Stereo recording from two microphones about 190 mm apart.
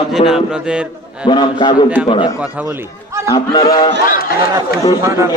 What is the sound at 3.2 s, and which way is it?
Speech, 25° left (ahead or behind).